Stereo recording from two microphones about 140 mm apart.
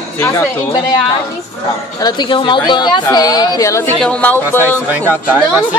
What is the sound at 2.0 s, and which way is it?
A woman's voice, 30° left (ahead or behind).